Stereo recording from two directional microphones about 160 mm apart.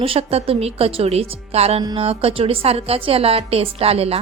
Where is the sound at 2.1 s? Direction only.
35° right (ahead or behind).